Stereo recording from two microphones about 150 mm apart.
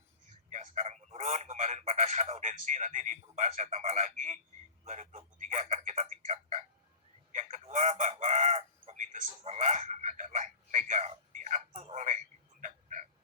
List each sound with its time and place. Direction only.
0.3 s telephone: 50° right (ahead or behind)
4.9 s speech: 50° right (ahead or behind)
7.3 s chicken: 50° right (ahead or behind)